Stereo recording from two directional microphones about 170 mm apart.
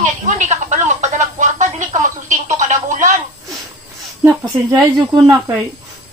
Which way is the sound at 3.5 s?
Centre (ahead or behind).